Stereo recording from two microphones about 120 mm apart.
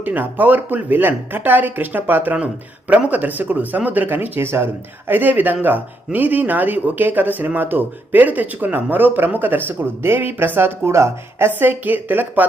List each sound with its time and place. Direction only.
0.0 s speech: 15° right (ahead or behind)